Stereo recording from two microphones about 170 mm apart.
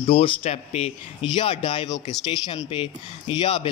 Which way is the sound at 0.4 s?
40° left (ahead or behind).